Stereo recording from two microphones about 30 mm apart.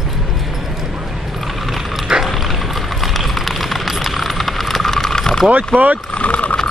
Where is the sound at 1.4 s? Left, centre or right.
Centre.